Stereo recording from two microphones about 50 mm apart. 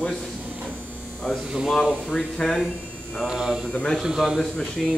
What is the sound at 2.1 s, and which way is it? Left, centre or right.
Speech, centre.